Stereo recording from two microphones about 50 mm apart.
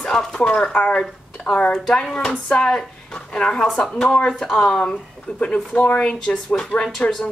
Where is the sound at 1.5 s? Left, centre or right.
Left.